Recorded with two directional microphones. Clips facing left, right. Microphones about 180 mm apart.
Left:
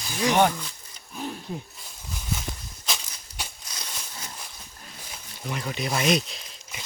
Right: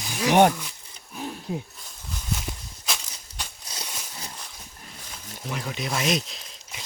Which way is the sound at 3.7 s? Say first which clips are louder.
Right 2 dB; 30° right (ahead or behind).